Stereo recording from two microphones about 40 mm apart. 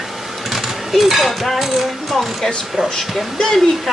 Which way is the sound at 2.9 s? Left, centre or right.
Centre.